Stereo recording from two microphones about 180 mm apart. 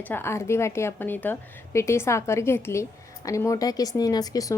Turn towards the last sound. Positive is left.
turn(degrees=20)  # may be behind; listen again after turning